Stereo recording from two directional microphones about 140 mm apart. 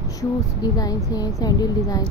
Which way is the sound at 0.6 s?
25° left (ahead or behind).